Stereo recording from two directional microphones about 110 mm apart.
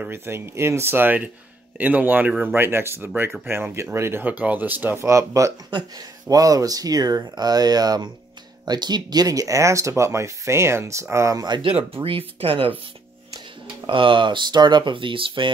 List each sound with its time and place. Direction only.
0.0 s speech: 20° right (ahead or behind)
5.7 s speech: 40° right (ahead or behind)
11.4 s speech: 45° right (ahead or behind)
11.7 s speech: 60° right (ahead or behind)
13.8 s speech: 50° right (ahead or behind)